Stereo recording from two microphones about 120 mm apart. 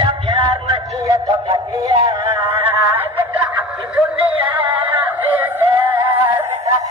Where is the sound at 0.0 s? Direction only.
40° right (ahead or behind); by 3.4 s 15° right (ahead or behind).